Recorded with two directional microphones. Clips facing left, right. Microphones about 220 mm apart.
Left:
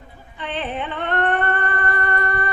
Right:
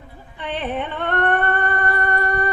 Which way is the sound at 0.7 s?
55° right (ahead or behind).